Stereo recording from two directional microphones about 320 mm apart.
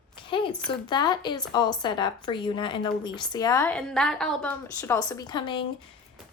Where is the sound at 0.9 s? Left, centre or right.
Centre.